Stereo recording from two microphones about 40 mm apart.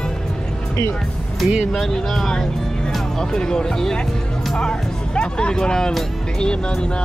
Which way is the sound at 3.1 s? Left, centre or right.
Centre.